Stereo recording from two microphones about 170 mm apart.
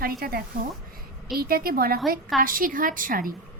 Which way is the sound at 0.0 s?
60° right (ahead or behind).